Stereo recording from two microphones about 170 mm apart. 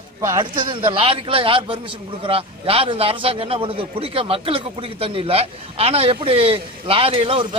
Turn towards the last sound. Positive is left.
turn(degrees=-30)  # may be behind; listen again after turning